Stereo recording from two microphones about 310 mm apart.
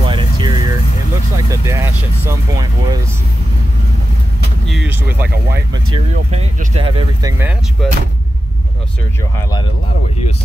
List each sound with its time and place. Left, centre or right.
0.0 s vehicle: centre
4.6 s a sound: centre
5.5 s speech: right
6.3 s speech: centre